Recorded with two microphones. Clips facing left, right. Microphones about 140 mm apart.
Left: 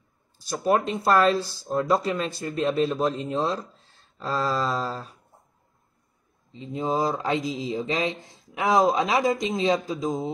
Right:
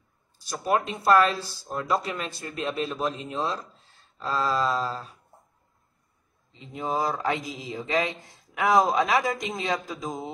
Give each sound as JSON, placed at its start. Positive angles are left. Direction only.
{"t": 0.5, "sound": "speech", "side_deg": 35}
{"t": 6.5, "sound": "speech", "side_deg": 30}